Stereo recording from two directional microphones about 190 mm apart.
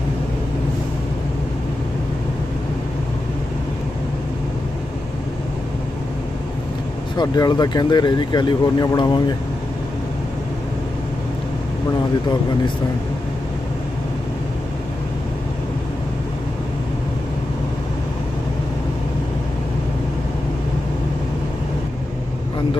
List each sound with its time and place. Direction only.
7.2 s speech: 20° left (ahead or behind)